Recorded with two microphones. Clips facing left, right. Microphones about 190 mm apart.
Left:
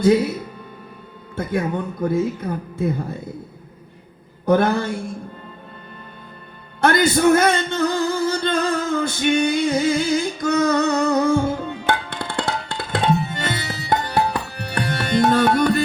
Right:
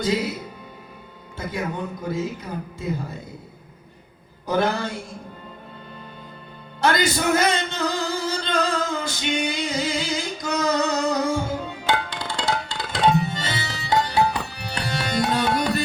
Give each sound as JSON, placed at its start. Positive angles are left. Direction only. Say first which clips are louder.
{"t": 0.0, "sound": "speech", "louder": "left 8 dB", "side_deg": 55}
{"t": 1.4, "sound": "speech", "louder": "left 5 dB", "side_deg": 55}
{"t": 4.4, "sound": "speech", "louder": "left 5 dB", "side_deg": 55}
{"t": 6.8, "sound": "male singing", "louder": "left 6 dB", "side_deg": 55}
{"t": 11.9, "sound": "music", "louder": "even", "side_deg": 60}